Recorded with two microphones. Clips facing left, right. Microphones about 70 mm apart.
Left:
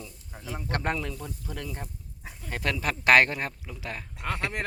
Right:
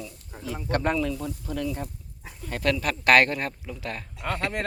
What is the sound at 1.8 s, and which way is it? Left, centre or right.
Goat, centre.